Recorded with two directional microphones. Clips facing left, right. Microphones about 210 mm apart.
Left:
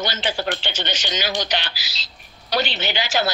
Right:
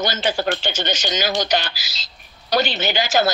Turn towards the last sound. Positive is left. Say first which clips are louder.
# right 4 dB
turn(degrees=-45)  # may be behind; listen again after turning